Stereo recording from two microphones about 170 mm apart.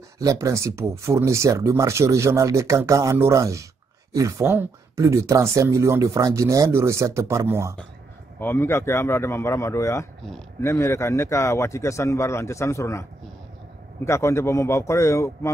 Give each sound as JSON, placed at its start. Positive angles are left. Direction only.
{"t": 0.2, "sound": "speech", "side_deg": -20}
{"t": 8.4, "sound": "a man's voice", "side_deg": 15}
{"t": 14.0, "sound": "a man's voice", "side_deg": 15}